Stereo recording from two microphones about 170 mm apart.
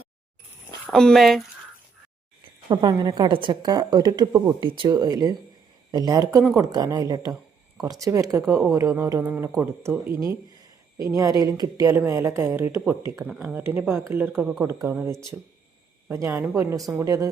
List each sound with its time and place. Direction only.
0.9 s speech: 5° left (ahead or behind)
2.6 s a woman's voice: 25° right (ahead or behind)